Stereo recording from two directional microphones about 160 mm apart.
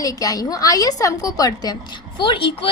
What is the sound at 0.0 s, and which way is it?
A woman's voice, 20° left (ahead or behind).